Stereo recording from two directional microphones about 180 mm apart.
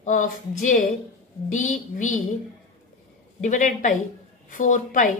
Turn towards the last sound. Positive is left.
turn(degrees=45)  # may be behind; listen again after turning